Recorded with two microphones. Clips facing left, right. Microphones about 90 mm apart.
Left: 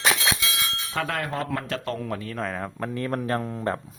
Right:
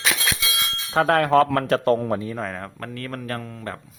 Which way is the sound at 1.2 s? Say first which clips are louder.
Right 11 dB; 85° right.